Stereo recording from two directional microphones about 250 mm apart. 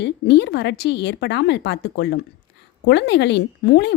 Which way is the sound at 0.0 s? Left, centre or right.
Left.